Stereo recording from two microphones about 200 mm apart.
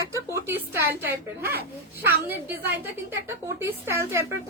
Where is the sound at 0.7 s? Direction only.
55° right (ahead or behind).